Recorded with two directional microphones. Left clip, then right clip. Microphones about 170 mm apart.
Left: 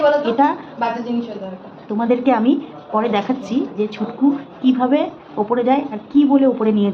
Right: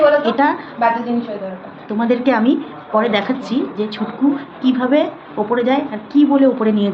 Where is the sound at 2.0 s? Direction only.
5° left (ahead or behind).